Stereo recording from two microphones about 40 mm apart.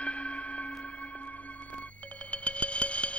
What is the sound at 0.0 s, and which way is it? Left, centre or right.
Music, left.